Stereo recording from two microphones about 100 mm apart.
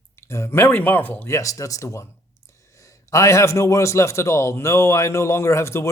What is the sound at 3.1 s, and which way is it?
A man's voice, 30° left (ahead or behind).